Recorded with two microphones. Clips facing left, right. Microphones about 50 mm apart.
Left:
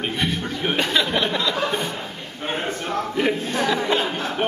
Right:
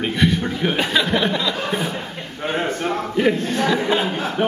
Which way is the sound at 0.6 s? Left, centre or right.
Centre.